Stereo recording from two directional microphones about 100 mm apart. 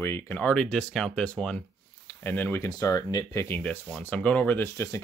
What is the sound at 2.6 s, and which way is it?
Speech, 35° left (ahead or behind).